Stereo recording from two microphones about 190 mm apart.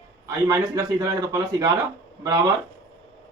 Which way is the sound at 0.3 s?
15° right (ahead or behind).